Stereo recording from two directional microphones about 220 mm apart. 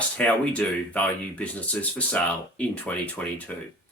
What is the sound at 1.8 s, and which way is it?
Speech, 5° left (ahead or behind).